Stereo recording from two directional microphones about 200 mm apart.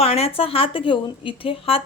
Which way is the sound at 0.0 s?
30° left (ahead or behind).